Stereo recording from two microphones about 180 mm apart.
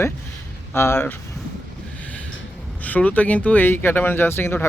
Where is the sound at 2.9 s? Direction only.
10° left (ahead or behind).